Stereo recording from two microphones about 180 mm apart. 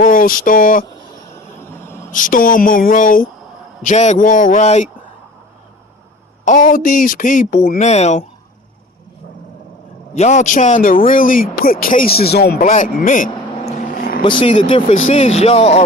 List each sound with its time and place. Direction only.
0.0 s speech: 50° left (ahead or behind)
2.1 s speech: 50° left (ahead or behind)
3.8 s speech: 40° left (ahead or behind)
6.4 s speech: 45° left (ahead or behind)
10.1 s speech: 40° left (ahead or behind); by 12.6 s 60° left (ahead or behind)
12.6 s vehicle: 45° left (ahead or behind)
14.2 s speech: 30° left (ahead or behind)